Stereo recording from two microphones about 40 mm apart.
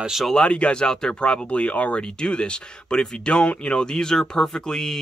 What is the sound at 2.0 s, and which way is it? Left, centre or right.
Speech, left.